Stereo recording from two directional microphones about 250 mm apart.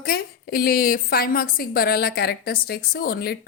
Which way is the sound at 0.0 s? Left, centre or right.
Left.